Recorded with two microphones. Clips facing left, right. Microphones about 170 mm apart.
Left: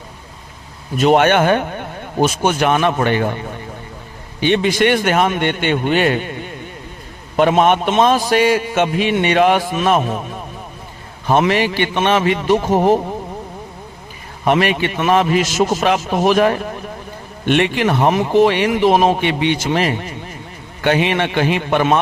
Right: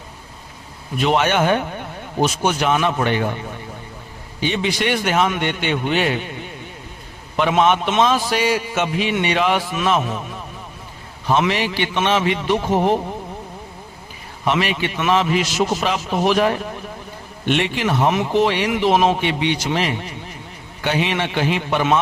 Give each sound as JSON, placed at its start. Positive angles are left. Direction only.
{"t": 0.9, "sound": "speech", "side_deg": 50}
{"t": 11.3, "sound": "speech", "side_deg": 50}
{"t": 14.4, "sound": "a man's voice", "side_deg": 55}
{"t": 19.2, "sound": "a man's voice", "side_deg": 55}